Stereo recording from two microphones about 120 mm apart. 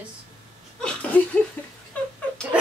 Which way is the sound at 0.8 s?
10° left (ahead or behind).